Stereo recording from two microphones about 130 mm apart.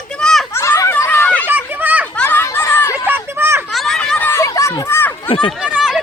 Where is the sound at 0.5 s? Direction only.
20° left (ahead or behind).